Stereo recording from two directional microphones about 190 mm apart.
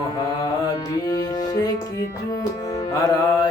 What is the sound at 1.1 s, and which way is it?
Music, 20° left (ahead or behind).